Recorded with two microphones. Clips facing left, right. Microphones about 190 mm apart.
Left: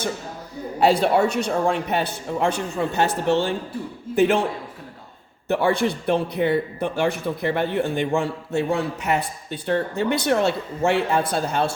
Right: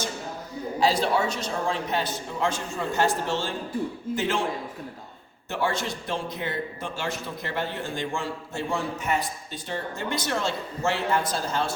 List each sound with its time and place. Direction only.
0.8 s a man's voice: 60° left (ahead or behind)
5.5 s a man's voice: 60° left (ahead or behind)